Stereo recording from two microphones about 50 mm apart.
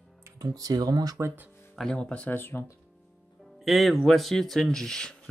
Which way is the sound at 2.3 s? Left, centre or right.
Left.